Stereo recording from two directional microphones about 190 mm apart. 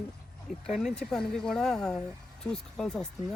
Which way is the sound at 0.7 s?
Centre (ahead or behind).